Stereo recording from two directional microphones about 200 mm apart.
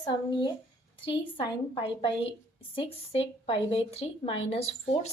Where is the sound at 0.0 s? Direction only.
20° left (ahead or behind).